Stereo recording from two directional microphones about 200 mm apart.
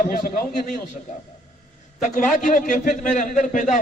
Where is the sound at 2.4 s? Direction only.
40° left (ahead or behind).